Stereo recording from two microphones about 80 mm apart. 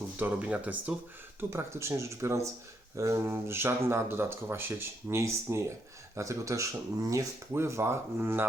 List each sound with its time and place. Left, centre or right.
0.2 s speech: centre
1.4 s speech: right